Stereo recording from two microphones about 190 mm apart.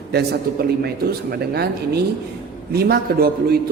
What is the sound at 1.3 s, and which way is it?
A man's voice, 55° right (ahead or behind).